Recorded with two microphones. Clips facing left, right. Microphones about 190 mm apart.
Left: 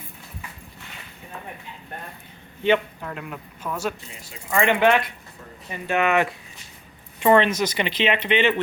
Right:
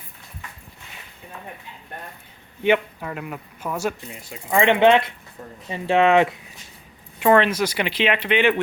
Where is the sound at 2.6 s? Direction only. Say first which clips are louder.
Right 1 dB; 5° right (ahead or behind); by 6.4 s 25° right (ahead or behind).